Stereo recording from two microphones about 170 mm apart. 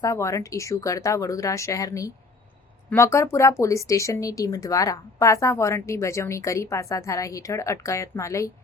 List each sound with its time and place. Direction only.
0.0 s speech: 15° left (ahead or behind)